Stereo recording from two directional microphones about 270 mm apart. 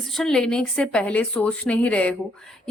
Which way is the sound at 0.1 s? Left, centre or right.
Centre.